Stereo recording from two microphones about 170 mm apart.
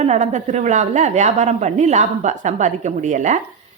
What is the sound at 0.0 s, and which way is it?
A woman's voice, 45° right (ahead or behind).